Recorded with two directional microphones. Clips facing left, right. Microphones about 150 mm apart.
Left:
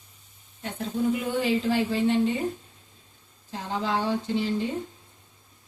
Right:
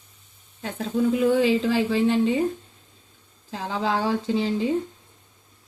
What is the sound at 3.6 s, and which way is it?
Speech, 90° right.